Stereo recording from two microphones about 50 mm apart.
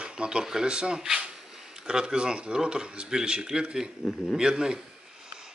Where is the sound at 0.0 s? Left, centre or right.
Centre.